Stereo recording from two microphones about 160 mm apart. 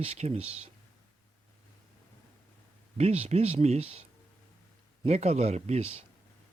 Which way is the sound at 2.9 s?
40° right (ahead or behind).